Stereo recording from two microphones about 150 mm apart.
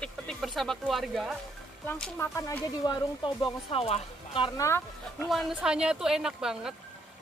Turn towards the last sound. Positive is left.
turn(degrees=-5)  # may be behind; listen again after turning